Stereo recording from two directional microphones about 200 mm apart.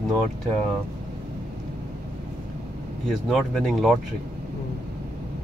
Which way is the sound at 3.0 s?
Centre (ahead or behind).